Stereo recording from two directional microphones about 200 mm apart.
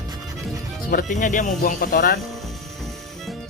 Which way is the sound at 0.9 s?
45° left (ahead or behind).